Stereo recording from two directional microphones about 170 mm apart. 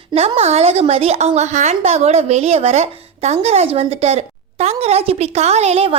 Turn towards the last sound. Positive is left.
turn(degrees=-35)  # may be behind; listen again after turning